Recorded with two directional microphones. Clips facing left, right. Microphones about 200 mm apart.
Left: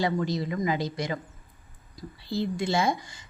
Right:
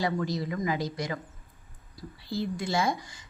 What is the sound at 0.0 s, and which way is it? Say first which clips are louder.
A woman's voice: left 2 dB; 25° left (ahead or behind).